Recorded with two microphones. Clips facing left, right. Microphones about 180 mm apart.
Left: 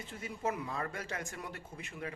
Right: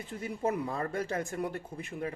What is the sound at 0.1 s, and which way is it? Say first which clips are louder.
Speech: right 5 dB; 35° right (ahead or behind).